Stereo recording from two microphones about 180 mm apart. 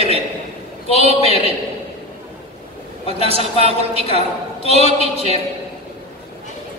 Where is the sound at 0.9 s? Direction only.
35° left (ahead or behind).